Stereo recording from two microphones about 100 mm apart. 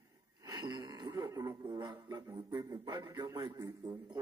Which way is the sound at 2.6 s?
40° right (ahead or behind).